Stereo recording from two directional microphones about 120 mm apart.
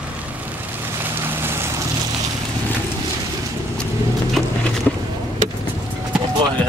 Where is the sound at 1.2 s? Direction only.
20° right (ahead or behind).